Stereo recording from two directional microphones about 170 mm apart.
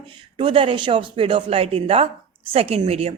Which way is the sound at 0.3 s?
30° right (ahead or behind).